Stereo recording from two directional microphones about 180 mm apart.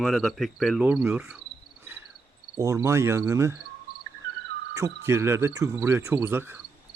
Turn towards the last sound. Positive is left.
turn(degrees=-10)  # may be behind; listen again after turning